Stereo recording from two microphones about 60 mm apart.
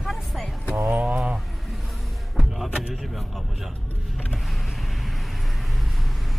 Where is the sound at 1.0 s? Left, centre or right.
Centre.